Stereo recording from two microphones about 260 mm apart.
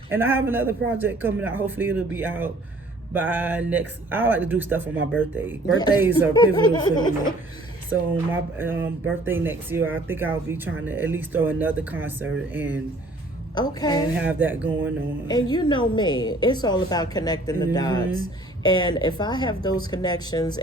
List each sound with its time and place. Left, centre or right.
0.1 s speech: centre
6.3 s a woman's voice: centre
7.9 s speech: centre
13.6 s a woman's voice: centre
14.2 s speech: centre
15.3 s a woman's voice: centre